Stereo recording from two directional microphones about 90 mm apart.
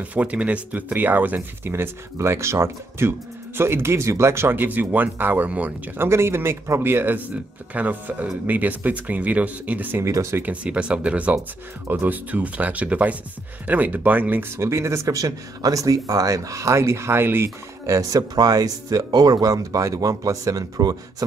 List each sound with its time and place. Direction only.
0.0 s speech: 15° right (ahead or behind)
10.0 s speech: 35° right (ahead or behind)
10.4 s speech: 15° right (ahead or behind)
14.6 s speech: 30° right (ahead or behind)
17.8 s speech: 40° right (ahead or behind)